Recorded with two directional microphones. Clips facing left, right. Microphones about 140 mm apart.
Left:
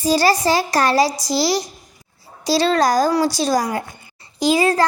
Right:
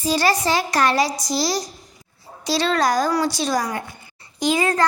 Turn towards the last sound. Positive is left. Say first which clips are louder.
# left 4 dB
turn(degrees=30)  # may be behind; listen again after turning